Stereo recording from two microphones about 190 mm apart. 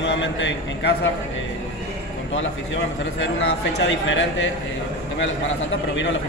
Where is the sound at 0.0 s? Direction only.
70° left (ahead or behind).